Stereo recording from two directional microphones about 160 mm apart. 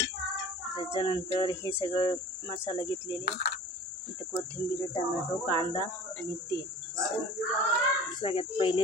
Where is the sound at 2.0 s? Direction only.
30° left (ahead or behind).